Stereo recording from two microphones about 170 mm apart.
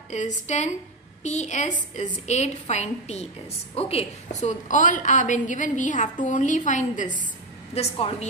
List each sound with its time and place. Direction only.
0.1 s a woman's voice: 45° left (ahead or behind)